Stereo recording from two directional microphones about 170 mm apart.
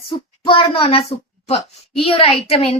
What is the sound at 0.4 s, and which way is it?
Speech, 30° left (ahead or behind).